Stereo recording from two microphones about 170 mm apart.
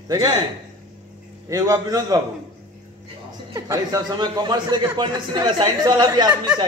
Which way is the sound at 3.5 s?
20° right (ahead or behind).